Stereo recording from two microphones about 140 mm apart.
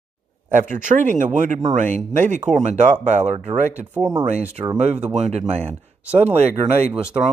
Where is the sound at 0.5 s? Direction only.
65° right (ahead or behind).